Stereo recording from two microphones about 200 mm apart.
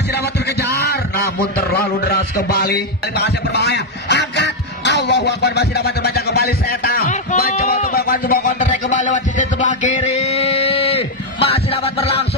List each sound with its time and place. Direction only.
0.7 s a man's voice: 50° left (ahead or behind)
7.9 s music: 45° left (ahead or behind); by 12.3 s 30° left (ahead or behind)